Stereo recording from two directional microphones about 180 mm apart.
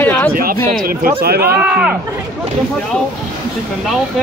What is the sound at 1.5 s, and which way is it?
Speech, 5° right (ahead or behind).